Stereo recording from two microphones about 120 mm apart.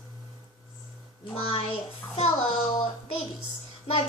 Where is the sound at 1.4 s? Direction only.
55° left (ahead or behind).